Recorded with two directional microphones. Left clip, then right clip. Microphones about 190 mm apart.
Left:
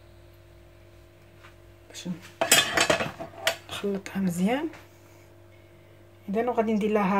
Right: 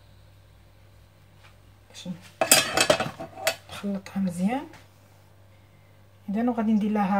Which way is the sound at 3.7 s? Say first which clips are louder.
Left 4 dB; 45° left (ahead or behind).